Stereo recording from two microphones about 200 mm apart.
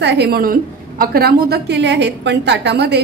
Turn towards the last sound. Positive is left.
turn(degrees=-55)  # may be behind; listen again after turning